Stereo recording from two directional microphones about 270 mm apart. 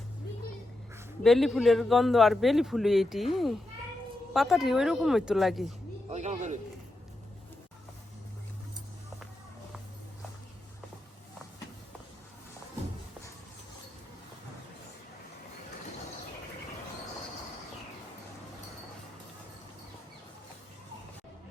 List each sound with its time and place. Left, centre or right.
1.2 s a man's voice: centre
6.1 s speech: right